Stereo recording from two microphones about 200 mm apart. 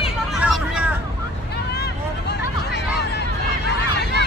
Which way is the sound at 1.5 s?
55° left (ahead or behind).